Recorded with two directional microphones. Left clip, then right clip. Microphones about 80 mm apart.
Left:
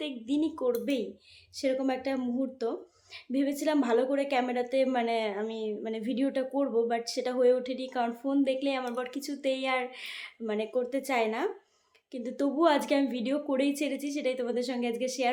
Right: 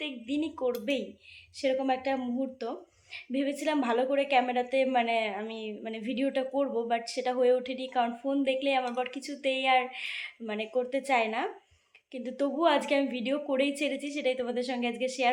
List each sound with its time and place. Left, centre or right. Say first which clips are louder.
0.0 s a woman's voice: left 2 dB; left